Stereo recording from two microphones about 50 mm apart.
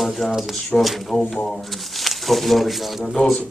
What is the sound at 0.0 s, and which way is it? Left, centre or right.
Speech, centre.